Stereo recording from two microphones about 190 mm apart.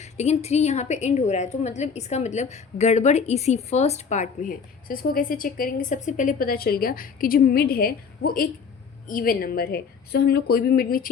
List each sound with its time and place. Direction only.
0.0 s a woman's voice: 35° left (ahead or behind)